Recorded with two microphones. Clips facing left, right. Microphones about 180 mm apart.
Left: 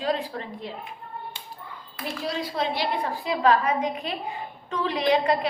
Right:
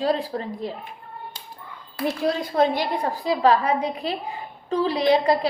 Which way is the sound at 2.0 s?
50° right (ahead or behind).